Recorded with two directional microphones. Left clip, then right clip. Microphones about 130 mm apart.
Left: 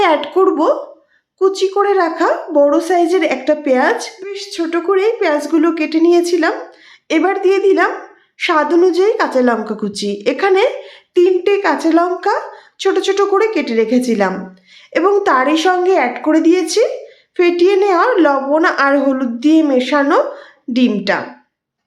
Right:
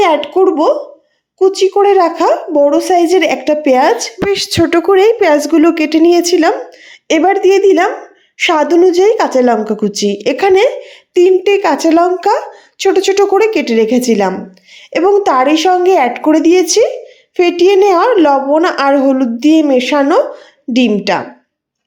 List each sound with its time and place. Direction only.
0.0 s a woman's voice: 20° right (ahead or behind)
4.3 s a woman's voice: 80° right; by 14.3 s 35° right (ahead or behind)
14.8 s a sound: 30° right (ahead or behind)
15.1 s a woman's voice: 25° right (ahead or behind)
15.8 s a woman's voice: 35° right (ahead or behind)